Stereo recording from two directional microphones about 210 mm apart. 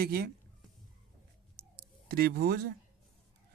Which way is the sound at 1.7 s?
50° right (ahead or behind).